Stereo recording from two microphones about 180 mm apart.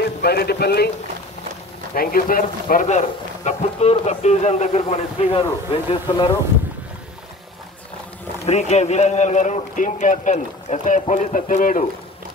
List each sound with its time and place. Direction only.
0.2 s speech: 60° left (ahead or behind)
2.0 s speech: 55° left (ahead or behind); by 5.4 s 35° left (ahead or behind)
5.9 s speech: 25° left (ahead or behind)
8.5 s a man's voice: 35° left (ahead or behind)